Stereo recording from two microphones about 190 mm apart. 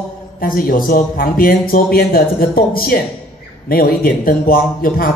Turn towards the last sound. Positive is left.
turn(degrees=50)  # may be behind; listen again after turning